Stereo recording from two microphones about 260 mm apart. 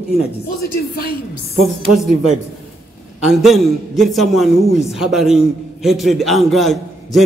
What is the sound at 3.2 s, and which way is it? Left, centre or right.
A man's voice, centre.